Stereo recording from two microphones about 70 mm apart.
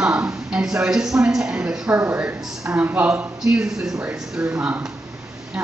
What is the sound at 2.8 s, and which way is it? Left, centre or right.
A woman's voice, right.